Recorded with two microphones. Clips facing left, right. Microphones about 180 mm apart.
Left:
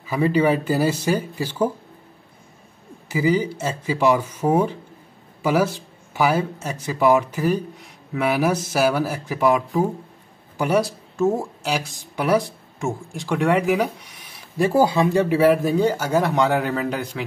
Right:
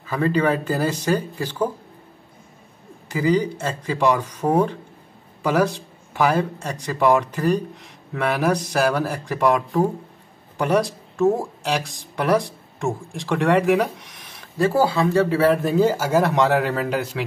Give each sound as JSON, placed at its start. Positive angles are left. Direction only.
{"t": 0.0, "sound": "speech", "side_deg": 10}
{"t": 3.1, "sound": "a man's voice", "side_deg": 10}
{"t": 14.6, "sound": "speech", "side_deg": 15}
{"t": 15.7, "sound": "a man's voice", "side_deg": -5}